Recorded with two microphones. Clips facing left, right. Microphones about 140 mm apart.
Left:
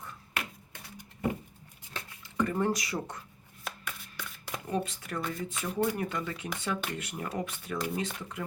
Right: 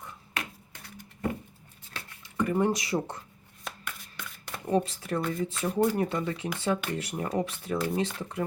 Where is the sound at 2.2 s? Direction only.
15° right (ahead or behind).